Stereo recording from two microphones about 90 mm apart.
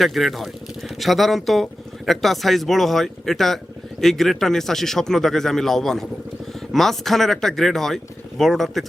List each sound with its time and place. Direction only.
0.0 s speech: centre (ahead or behind)